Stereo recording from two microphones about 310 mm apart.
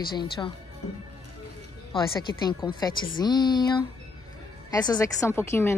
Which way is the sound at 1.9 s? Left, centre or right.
Centre.